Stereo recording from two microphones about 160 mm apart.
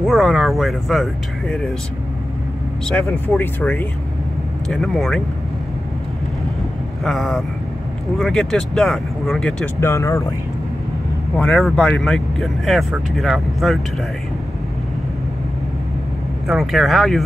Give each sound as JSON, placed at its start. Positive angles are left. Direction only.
{"t": 0.0, "sound": "speech", "side_deg": -5}
{"t": 2.9, "sound": "speech", "side_deg": 10}
{"t": 7.1, "sound": "speech", "side_deg": 0}
{"t": 9.8, "sound": "speech", "side_deg": 20}
{"t": 11.3, "sound": "speech", "side_deg": 5}
{"t": 16.4, "sound": "speech", "side_deg": 0}